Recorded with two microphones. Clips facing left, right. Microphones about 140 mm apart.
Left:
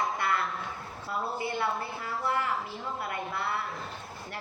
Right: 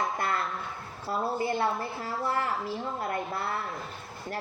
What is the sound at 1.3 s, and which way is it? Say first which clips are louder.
A woman's voice: right 3 dB; 40° right (ahead or behind).